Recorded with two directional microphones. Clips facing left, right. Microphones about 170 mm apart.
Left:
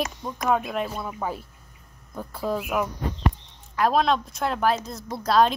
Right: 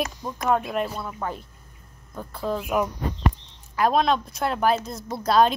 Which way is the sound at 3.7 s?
Centre (ahead or behind).